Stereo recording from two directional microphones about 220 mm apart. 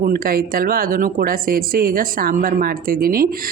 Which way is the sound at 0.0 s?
40° right (ahead or behind).